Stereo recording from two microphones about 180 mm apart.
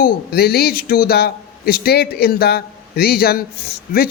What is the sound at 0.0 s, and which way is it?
A man's voice, 60° left (ahead or behind).